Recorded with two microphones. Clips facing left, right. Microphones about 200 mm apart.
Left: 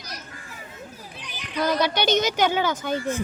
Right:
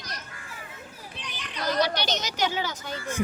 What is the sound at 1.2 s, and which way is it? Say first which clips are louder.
Children playing: even; 10° left (ahead or behind).